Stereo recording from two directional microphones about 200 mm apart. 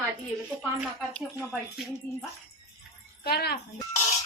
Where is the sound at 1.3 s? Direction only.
10° right (ahead or behind).